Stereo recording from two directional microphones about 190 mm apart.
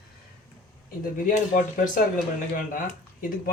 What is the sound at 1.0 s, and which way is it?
Speech, 45° left (ahead or behind).